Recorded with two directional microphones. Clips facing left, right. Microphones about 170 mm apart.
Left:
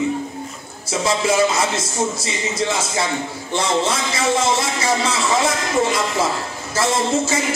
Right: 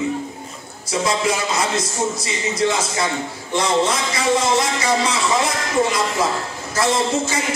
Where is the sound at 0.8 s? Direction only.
25° left (ahead or behind).